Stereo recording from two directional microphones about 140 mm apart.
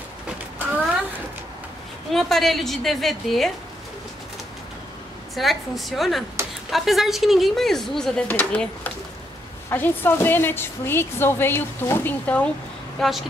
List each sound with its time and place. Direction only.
2.1 s speech: centre (ahead or behind)
5.3 s a woman's voice: centre (ahead or behind)